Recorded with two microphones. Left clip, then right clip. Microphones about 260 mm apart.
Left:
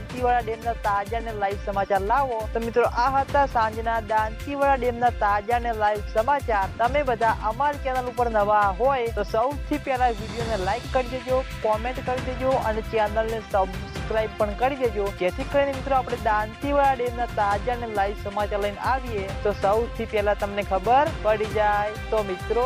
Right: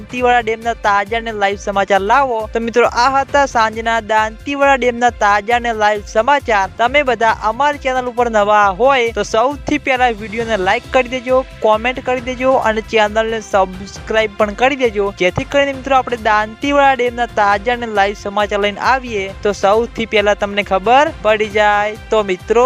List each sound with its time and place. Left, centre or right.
0.2 s speech: right